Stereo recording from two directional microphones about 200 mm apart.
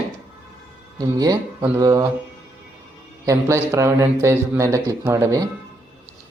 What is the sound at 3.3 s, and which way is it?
A man's voice, 15° right (ahead or behind).